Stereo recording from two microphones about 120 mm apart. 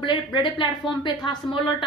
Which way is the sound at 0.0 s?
40° left (ahead or behind).